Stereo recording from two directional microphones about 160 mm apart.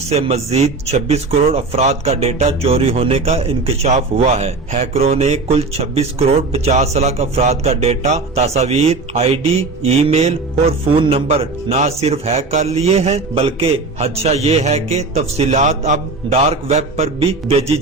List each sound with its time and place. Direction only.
0.1 s speech: 40° right (ahead or behind)